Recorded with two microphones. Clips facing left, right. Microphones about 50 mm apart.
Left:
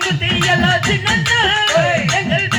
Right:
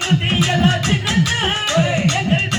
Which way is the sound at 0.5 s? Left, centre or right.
Left.